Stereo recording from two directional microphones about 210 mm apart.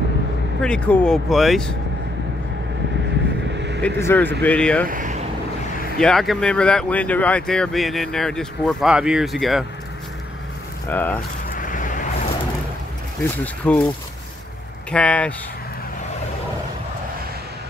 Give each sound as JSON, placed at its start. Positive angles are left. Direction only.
{"t": 0.6, "sound": "speech", "side_deg": 5}
{"t": 3.5, "sound": "vehicle", "side_deg": -55}
{"t": 3.8, "sound": "speech", "side_deg": 10}
{"t": 4.8, "sound": "speech", "side_deg": -40}
{"t": 5.9, "sound": "speech", "side_deg": 0}
{"t": 10.9, "sound": "speech", "side_deg": 10}
{"t": 11.5, "sound": "vehicle", "side_deg": 40}
{"t": 13.2, "sound": "speech", "side_deg": 5}
{"t": 14.9, "sound": "speech", "side_deg": 5}